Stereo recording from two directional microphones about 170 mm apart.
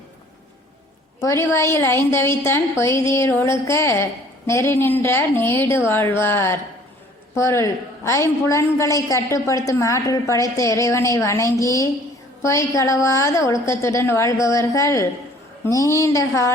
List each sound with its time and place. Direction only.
1.2 s a woman's voice: 15° left (ahead or behind)